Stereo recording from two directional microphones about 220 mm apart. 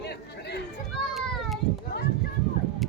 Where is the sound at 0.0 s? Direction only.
50° left (ahead or behind).